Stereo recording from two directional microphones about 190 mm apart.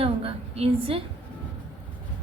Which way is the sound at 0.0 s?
30° right (ahead or behind).